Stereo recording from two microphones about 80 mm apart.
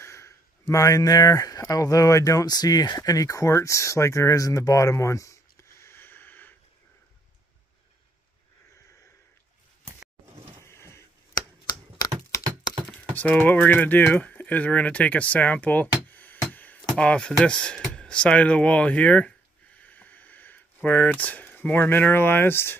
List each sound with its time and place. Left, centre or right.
0.0 s speech: left
2.4 s speech: left
10.6 s a sound: left
13.1 s speech: centre
16.1 s music: left
16.9 s speech: centre; by 22.8 s left